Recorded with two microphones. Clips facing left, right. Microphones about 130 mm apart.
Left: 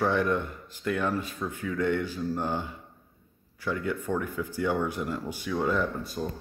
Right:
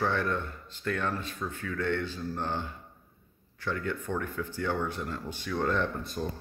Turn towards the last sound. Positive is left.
turn(degrees=5)  # may be behind; listen again after turning